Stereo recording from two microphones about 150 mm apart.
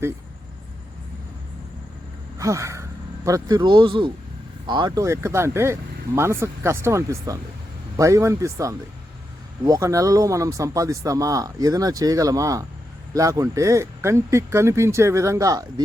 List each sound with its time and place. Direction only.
2.4 s a man's voice: 20° right (ahead or behind)